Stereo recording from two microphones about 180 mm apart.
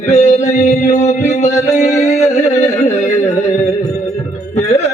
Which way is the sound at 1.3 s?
40° left (ahead or behind).